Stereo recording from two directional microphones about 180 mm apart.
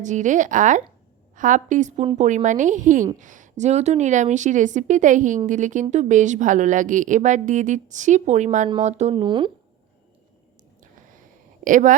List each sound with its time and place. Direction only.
0.0 s speech: 45° right (ahead or behind)
9.2 s speech: 25° right (ahead or behind)
11.6 s speech: 45° right (ahead or behind)